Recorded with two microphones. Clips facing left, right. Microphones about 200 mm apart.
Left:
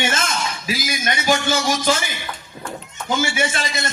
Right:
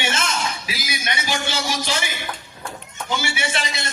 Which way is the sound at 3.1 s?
50° left (ahead or behind).